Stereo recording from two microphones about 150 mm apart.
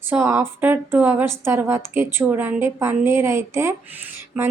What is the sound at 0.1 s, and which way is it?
Speech, 15° right (ahead or behind).